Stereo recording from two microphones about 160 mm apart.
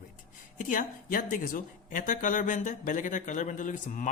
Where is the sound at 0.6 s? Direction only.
55° left (ahead or behind).